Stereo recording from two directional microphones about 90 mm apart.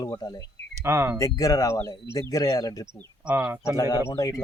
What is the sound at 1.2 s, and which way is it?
Speech, 40° left (ahead or behind).